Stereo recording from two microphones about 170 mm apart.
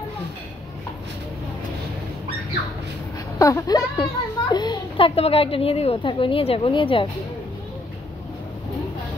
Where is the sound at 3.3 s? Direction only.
20° left (ahead or behind).